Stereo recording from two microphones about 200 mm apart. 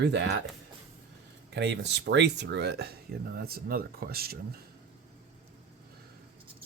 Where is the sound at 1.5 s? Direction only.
60° right (ahead or behind).